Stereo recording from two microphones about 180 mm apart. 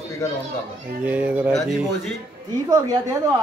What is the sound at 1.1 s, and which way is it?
Speech, 10° right (ahead or behind).